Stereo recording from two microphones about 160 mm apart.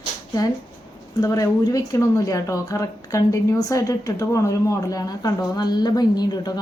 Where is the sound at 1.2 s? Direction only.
20° left (ahead or behind).